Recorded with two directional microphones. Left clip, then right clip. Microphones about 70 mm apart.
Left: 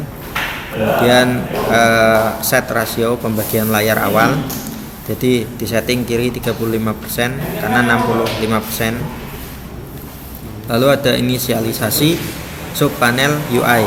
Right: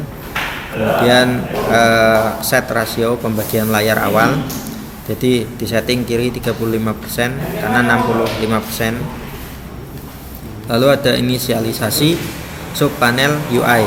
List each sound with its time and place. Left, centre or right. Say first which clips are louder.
0.4 s a sound: even; left
0.8 s speech: even; centre
10.7 s speech: even; centre